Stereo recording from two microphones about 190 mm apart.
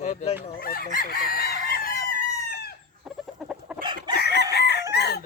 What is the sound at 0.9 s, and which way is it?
Chicken, 50° left (ahead or behind).